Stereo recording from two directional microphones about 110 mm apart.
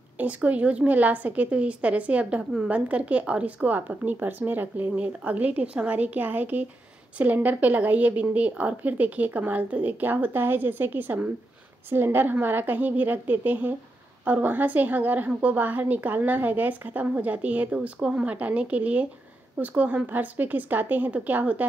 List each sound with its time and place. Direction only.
0.2 s a woman's voice: 15° right (ahead or behind)